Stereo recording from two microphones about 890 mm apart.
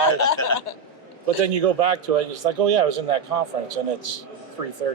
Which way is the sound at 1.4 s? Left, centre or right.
Right.